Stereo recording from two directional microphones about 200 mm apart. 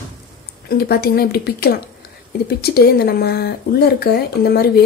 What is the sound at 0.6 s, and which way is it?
A woman's voice, 50° left (ahead or behind).